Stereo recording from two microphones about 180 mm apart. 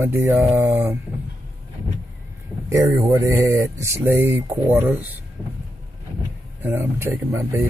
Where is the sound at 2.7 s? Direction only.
15° right (ahead or behind).